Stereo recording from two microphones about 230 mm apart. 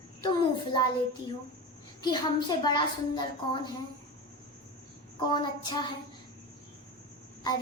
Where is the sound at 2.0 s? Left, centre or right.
Centre.